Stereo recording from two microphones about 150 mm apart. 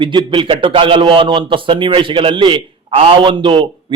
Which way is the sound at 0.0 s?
30° right (ahead or behind).